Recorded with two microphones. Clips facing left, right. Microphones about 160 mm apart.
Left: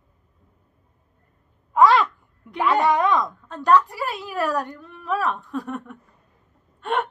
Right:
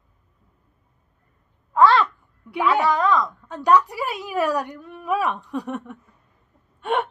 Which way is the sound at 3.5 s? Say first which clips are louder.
Even; 10° right (ahead or behind).